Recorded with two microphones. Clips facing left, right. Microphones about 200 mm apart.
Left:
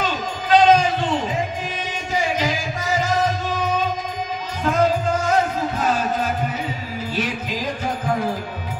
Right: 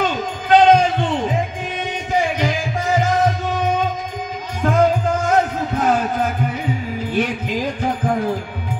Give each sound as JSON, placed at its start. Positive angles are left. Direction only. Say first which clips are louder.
{"t": 0.0, "sound": "a sound", "louder": "right 3 dB", "side_deg": -55}
{"t": 2.1, "sound": "music", "louder": "right 2 dB", "side_deg": -55}
{"t": 4.6, "sound": "music", "louder": "right 3 dB", "side_deg": -55}
{"t": 7.1, "sound": "music", "louder": "right 5 dB", "side_deg": -55}